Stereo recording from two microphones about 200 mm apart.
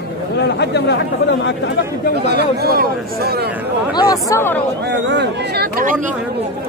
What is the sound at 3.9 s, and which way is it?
Speech, 20° left (ahead or behind).